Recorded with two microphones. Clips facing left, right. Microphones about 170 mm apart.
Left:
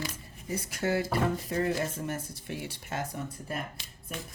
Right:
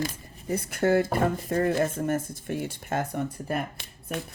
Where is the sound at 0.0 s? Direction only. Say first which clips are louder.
Right 6 dB; 55° right (ahead or behind).